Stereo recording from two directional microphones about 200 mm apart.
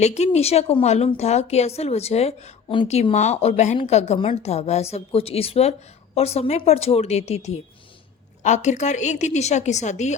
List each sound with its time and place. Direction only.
0.0 s speech: 35° left (ahead or behind)